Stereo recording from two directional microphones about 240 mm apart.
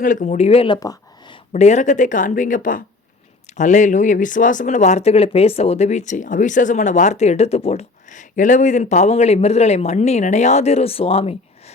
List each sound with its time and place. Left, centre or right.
0.0 s speech: left; by 1.4 s centre
1.5 s speech: left